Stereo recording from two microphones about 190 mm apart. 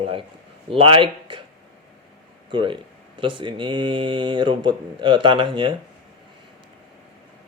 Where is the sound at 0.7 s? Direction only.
30° right (ahead or behind).